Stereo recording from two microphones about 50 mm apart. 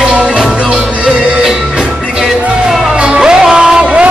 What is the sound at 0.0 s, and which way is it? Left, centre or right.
Music, right.